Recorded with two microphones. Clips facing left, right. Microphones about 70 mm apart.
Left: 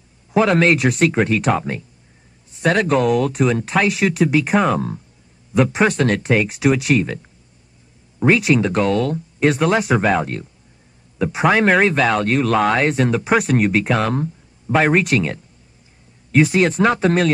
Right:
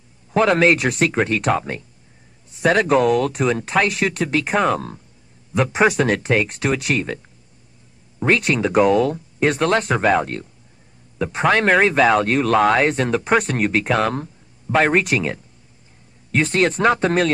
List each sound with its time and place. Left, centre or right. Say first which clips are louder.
0.3 s speech: even; centre